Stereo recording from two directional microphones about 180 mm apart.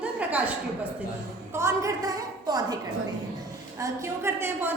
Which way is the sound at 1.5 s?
15° right (ahead or behind).